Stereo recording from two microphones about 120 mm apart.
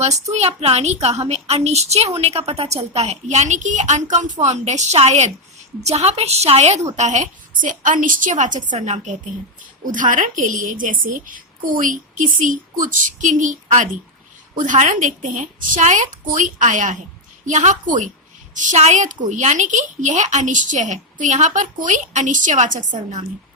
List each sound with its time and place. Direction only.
0.0 s a woman's voice: 65° right (ahead or behind)
6.9 s a woman's voice: 80° right